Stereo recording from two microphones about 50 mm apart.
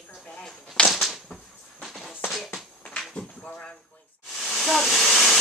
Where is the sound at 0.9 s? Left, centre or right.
Centre.